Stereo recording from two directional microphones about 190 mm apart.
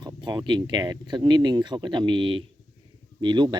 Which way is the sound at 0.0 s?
20° right (ahead or behind).